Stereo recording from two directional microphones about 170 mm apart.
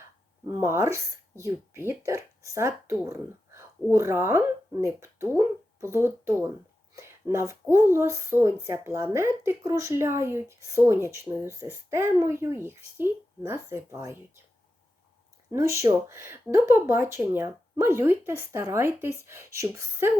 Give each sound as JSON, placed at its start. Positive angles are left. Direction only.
{"t": 0.4, "sound": "speech", "side_deg": -20}
{"t": 6.9, "sound": "a sound", "side_deg": -15}
{"t": 7.7, "sound": "speech", "side_deg": -15}
{"t": 15.5, "sound": "speech", "side_deg": -20}